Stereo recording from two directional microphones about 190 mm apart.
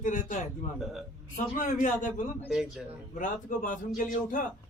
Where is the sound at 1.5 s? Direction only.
45° left (ahead or behind).